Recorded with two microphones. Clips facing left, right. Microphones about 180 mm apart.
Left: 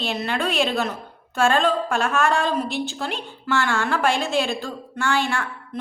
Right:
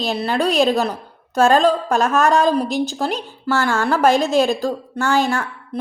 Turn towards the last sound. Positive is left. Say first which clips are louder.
# right 4 dB
turn(degrees=-40)  # may be behind; listen again after turning